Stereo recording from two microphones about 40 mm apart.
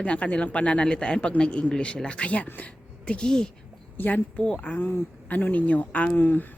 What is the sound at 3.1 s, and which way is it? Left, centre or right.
Speech, left.